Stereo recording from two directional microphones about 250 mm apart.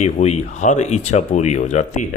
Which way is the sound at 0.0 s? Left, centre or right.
Left.